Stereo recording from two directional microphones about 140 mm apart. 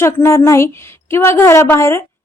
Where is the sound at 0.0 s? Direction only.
20° left (ahead or behind).